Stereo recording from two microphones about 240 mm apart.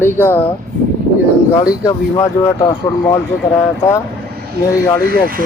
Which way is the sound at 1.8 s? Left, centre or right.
Centre.